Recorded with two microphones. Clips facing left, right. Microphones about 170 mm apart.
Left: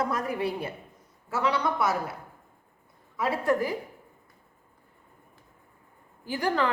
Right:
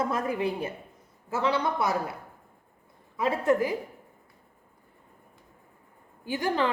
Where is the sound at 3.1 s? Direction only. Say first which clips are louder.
Right 2 dB; 20° right (ahead or behind).